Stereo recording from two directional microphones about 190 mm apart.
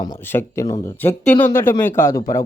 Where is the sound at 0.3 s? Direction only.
15° left (ahead or behind).